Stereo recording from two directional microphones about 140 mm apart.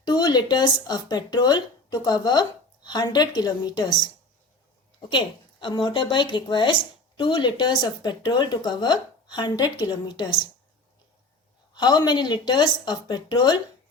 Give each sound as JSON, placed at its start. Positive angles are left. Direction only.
{"t": 0.0, "sound": "speech", "side_deg": 30}
{"t": 11.7, "sound": "speech", "side_deg": 30}